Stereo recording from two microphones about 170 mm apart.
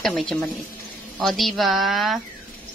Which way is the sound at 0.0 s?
Centre (ahead or behind).